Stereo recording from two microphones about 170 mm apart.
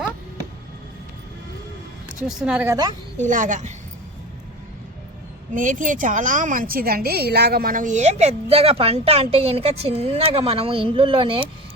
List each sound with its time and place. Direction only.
2.2 s speech: 5° right (ahead or behind)
2.6 s a woman's voice: 25° right (ahead or behind)
3.2 s a woman's voice: 50° right (ahead or behind)
5.5 s a woman's voice: 50° right (ahead or behind); by 11.4 s 30° right (ahead or behind)